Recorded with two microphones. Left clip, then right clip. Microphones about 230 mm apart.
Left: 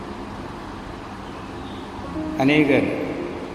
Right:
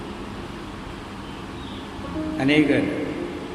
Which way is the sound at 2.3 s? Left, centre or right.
Centre.